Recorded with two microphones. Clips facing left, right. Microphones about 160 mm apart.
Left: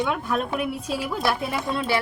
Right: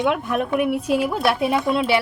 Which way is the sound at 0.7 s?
70° right (ahead or behind).